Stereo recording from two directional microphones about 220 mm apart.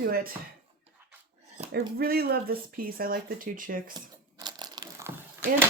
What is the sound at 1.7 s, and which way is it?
Speech, 45° right (ahead or behind).